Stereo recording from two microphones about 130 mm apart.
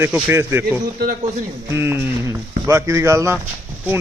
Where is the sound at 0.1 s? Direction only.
15° right (ahead or behind).